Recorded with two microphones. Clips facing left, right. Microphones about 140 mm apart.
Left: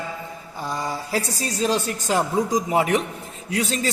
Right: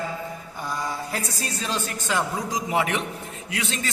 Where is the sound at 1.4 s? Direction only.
35° left (ahead or behind).